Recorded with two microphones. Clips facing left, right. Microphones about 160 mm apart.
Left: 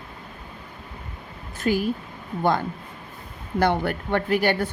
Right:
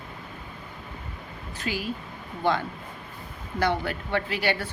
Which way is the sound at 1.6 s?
50° left (ahead or behind).